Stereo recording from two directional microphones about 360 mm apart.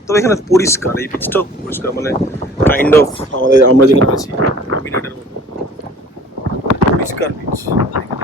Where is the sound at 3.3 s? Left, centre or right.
Left.